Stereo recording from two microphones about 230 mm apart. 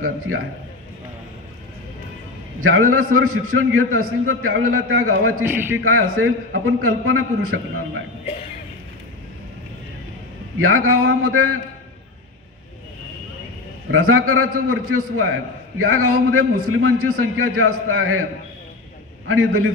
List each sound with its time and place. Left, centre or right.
2.6 s a man's voice: right
5.4 s a man's voice: centre
5.9 s a man's voice: right
10.6 s a man's voice: right
13.8 s a man's voice: right
19.2 s a man's voice: right